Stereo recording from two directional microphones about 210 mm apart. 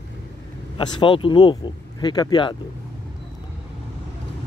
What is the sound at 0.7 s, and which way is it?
Speech, 20° left (ahead or behind).